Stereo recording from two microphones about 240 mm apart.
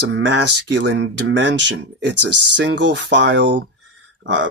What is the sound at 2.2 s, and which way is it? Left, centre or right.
Speech, right.